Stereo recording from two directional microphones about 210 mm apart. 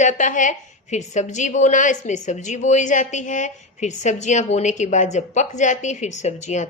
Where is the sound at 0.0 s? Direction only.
35° left (ahead or behind).